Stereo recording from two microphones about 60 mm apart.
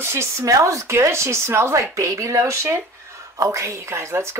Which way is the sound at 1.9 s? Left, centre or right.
Right.